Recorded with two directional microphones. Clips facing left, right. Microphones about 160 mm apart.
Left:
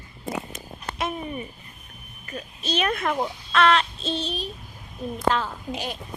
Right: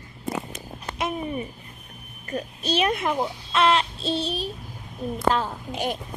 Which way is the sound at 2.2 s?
40° right (ahead or behind).